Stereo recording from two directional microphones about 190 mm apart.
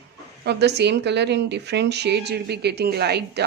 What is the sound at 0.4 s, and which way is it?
Speech, 60° right (ahead or behind).